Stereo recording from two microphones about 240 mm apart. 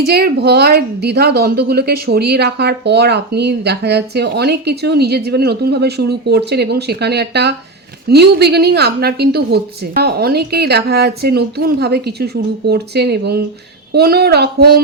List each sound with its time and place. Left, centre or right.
0.0 s a woman's voice: right